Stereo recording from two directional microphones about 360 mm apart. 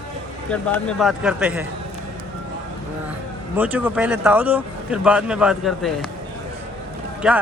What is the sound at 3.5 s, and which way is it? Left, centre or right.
Speech, centre.